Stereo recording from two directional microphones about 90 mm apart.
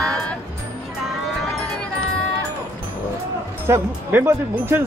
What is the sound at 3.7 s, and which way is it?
Speech, 30° right (ahead or behind).